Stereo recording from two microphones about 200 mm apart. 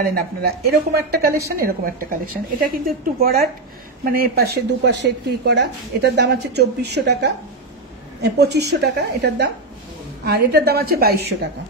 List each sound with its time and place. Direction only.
0.0 s a woman's voice: 50° right (ahead or behind)